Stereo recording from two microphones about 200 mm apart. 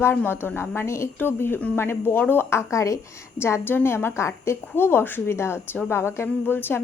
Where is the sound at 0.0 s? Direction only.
10° left (ahead or behind).